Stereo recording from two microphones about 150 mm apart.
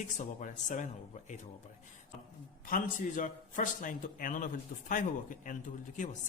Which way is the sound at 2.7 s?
60° left (ahead or behind).